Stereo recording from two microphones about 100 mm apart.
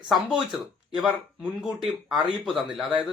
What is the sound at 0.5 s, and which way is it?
A man's voice, centre (ahead or behind).